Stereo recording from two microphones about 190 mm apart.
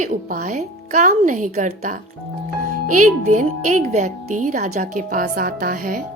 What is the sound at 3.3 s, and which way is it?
A woman's voice, 40° right (ahead or behind).